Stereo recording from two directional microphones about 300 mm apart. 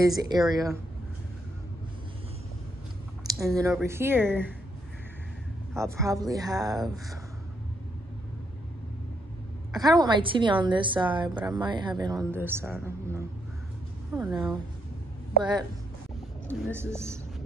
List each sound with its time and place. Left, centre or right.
0.0 s a woman's voice: centre
3.3 s a woman's voice: centre
5.9 s a woman's voice: centre
9.7 s a woman's voice: centre
16.7 s a woman's voice: centre